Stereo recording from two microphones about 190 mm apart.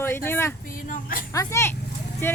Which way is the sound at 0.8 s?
45° left (ahead or behind).